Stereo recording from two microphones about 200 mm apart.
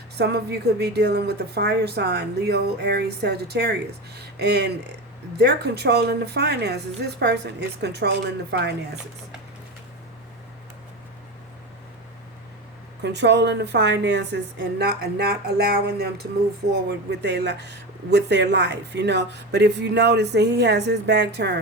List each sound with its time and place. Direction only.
0.2 s speech: 55° right (ahead or behind)
13.0 s speech: 60° right (ahead or behind)